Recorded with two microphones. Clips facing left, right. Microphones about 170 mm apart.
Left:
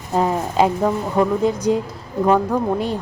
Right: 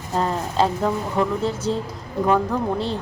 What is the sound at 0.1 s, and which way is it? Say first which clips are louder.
Speech: left 4 dB; 15° left (ahead or behind).